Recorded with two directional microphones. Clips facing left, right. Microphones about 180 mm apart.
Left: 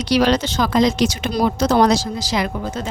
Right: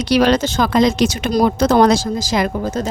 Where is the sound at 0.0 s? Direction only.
55° right (ahead or behind).